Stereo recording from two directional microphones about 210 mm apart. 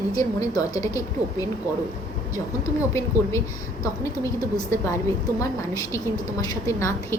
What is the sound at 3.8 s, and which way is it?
A woman's voice, 20° left (ahead or behind).